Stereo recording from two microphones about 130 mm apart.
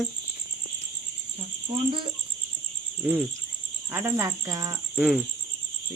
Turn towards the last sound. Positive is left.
turn(degrees=-5)  # may be behind; listen again after turning